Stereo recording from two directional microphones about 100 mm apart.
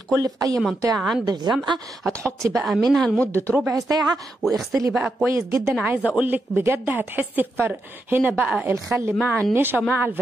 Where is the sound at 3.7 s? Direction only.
35° right (ahead or behind).